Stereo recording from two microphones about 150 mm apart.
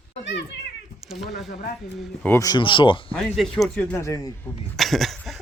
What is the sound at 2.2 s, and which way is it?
Speech, 15° left (ahead or behind).